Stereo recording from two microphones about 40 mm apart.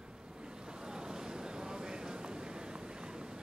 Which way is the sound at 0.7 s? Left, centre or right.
Centre.